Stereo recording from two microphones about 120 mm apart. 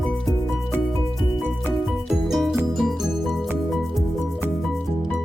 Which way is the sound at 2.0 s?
5° right (ahead or behind).